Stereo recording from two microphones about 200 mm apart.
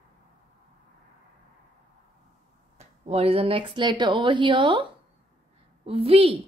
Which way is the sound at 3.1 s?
30° right (ahead or behind).